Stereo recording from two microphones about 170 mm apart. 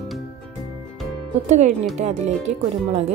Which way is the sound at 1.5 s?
40° right (ahead or behind).